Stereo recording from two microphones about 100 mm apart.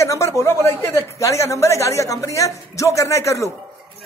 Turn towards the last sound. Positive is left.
turn(degrees=30)  # may be behind; listen again after turning